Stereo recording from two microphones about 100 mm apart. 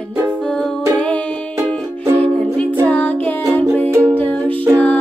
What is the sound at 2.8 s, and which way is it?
Music, 15° left (ahead or behind).